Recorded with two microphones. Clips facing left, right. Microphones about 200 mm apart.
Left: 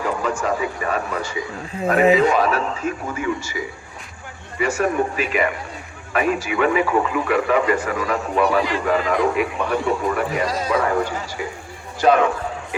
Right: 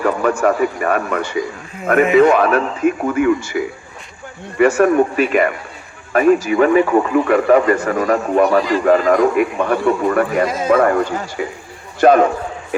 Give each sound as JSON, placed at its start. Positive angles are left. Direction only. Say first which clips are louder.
{"t": 0.0, "sound": "a man's voice", "louder": "right 7 dB", "side_deg": -60}